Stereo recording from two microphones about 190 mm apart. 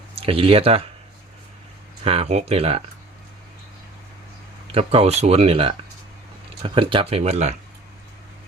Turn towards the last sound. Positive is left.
turn(degrees=-35)  # may be behind; listen again after turning